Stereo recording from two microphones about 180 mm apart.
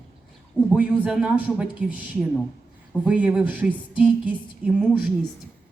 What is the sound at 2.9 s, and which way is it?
A man's voice, 5° right (ahead or behind).